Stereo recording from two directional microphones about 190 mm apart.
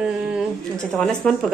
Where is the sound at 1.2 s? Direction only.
5° left (ahead or behind).